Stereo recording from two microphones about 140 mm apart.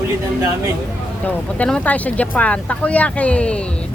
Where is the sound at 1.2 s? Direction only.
10° left (ahead or behind).